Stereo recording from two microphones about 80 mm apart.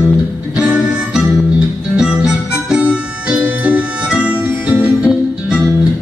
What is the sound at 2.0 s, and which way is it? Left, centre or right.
Music, centre.